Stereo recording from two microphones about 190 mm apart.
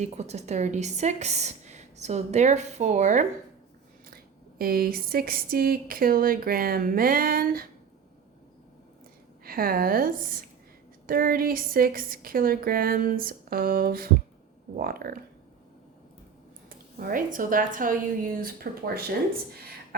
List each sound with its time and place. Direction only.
0.0 s a woman's voice: 35° right (ahead or behind)
4.1 s speech: 50° right (ahead or behind)
9.4 s a woman's voice: 50° right (ahead or behind)
16.6 s speech: 50° right (ahead or behind)